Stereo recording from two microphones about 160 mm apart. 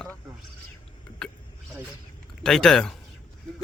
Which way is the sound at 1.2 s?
5° left (ahead or behind).